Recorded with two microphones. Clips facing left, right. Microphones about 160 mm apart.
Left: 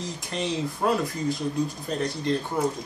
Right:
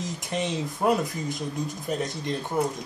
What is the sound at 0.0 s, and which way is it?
A man's voice, 20° right (ahead or behind).